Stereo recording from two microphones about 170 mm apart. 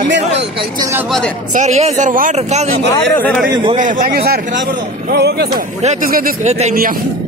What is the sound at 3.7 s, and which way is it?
Speech, 50° right (ahead or behind).